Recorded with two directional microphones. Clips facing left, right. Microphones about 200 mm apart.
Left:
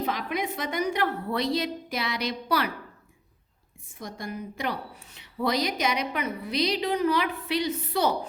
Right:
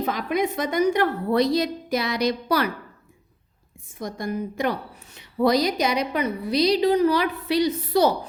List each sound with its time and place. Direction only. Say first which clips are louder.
0.0 s a woman's voice: right 5 dB; 45° right (ahead or behind)
4.0 s a woman's voice: right 7 dB; 45° right (ahead or behind)